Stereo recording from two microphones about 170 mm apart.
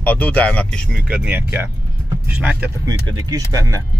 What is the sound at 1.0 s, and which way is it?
Speech, 5° right (ahead or behind).